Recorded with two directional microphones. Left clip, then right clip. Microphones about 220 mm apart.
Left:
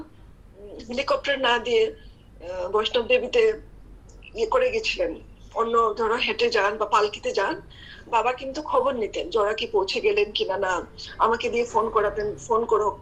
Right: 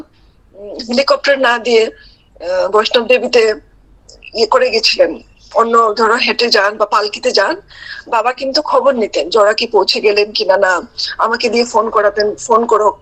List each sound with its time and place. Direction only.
0.7 s speech: 50° right (ahead or behind)